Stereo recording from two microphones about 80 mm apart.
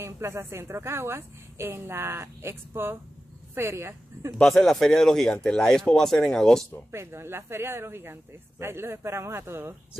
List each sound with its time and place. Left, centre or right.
0.0 s a woman's voice: right
4.4 s speech: centre
6.9 s a woman's voice: right